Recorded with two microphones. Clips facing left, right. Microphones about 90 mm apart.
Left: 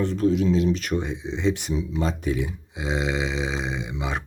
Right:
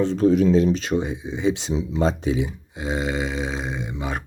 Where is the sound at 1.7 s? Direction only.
35° right (ahead or behind).